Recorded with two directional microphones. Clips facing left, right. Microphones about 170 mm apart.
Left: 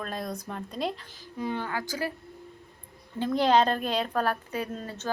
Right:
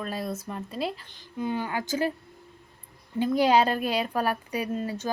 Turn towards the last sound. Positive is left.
turn(degrees=-10)  # may be behind; listen again after turning